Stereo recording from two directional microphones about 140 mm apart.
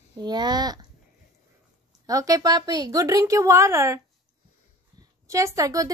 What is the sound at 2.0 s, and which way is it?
A woman's voice, 25° right (ahead or behind).